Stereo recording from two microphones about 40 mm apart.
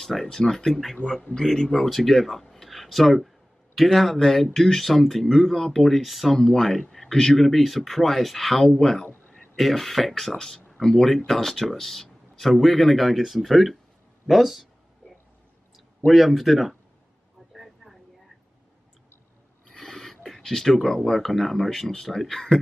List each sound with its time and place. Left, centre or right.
0.0 s speech: centre
0.4 s speech: centre
2.5 s a sound: centre
3.7 s speech: centre
10.3 s speech: centre
16.1 s speech: centre
19.7 s a sound: centre
20.2 s speech: centre